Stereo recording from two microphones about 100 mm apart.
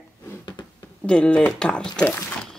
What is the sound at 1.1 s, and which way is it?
Speech, 10° left (ahead or behind).